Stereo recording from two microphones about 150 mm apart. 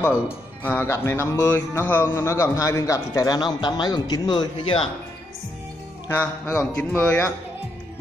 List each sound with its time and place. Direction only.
0.7 s music: 15° left (ahead or behind)
2.1 s speech: 15° left (ahead or behind)
6.0 s music: 15° left (ahead or behind)
6.6 s music: 5° left (ahead or behind)